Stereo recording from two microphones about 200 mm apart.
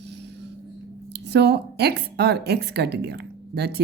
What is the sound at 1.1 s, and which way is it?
A woman's voice, 55° right (ahead or behind).